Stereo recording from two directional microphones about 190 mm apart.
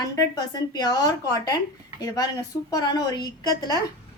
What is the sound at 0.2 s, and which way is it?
A woman's voice, 20° left (ahead or behind).